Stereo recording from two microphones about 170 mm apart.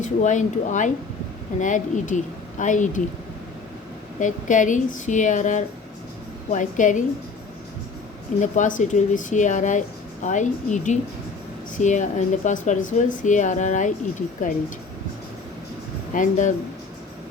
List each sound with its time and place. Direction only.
0.0 s speech: 45° left (ahead or behind)
4.2 s speech: 50° left (ahead or behind)
8.4 s speech: 50° left (ahead or behind)
16.1 s speech: 50° left (ahead or behind)